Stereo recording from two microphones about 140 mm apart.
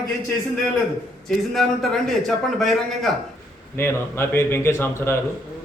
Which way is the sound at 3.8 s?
15° left (ahead or behind).